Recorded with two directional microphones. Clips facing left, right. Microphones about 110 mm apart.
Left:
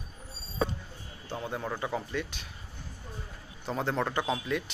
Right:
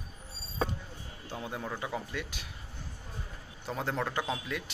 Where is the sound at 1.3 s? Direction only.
5° right (ahead or behind).